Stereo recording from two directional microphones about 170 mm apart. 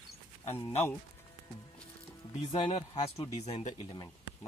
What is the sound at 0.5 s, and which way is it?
Speech, 35° left (ahead or behind).